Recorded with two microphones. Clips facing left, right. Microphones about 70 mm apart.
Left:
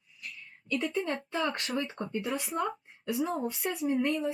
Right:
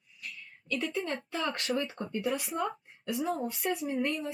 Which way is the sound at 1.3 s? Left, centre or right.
Left.